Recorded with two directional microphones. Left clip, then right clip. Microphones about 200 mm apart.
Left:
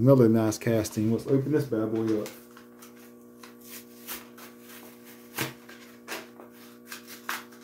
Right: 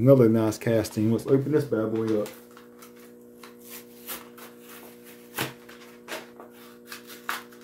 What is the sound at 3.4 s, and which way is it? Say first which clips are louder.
Rub: right 2 dB; 15° right (ahead or behind).